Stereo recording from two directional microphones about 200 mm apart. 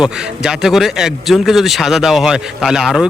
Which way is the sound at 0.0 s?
5° right (ahead or behind).